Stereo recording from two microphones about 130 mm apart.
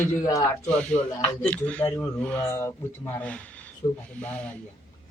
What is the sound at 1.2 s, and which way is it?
Speech, 10° left (ahead or behind).